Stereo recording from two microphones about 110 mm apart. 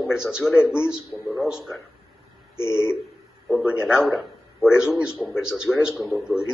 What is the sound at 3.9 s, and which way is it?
A man's voice, 5° right (ahead or behind).